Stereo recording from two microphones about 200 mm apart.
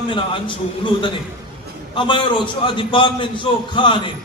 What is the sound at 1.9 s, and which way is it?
A man's voice, 25° left (ahead or behind).